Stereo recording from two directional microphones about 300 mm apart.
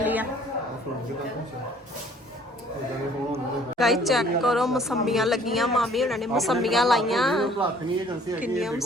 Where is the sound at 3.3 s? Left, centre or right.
Centre.